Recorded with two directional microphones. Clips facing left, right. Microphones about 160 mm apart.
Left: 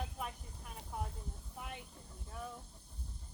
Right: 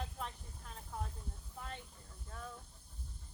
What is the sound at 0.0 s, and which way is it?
Vehicle, 10° left (ahead or behind).